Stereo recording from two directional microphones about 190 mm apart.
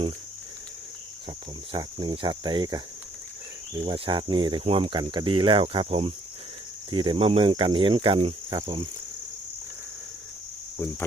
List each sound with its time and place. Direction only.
1.7 s speech: 25° right (ahead or behind)
3.8 s speech: 25° right (ahead or behind)